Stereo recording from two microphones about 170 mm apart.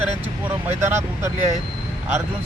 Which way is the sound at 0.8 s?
15° right (ahead or behind).